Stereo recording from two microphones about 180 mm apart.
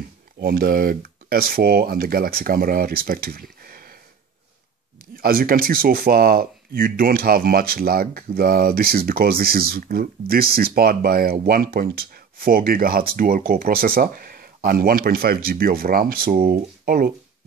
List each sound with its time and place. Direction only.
0.4 s speech: 60° right (ahead or behind)
5.1 s speech: 55° right (ahead or behind)